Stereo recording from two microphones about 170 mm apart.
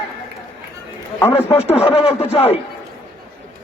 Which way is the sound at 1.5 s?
35° left (ahead or behind).